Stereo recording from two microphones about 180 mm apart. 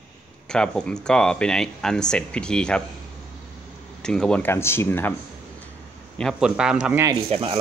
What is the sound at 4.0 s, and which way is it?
Speech, 5° left (ahead or behind).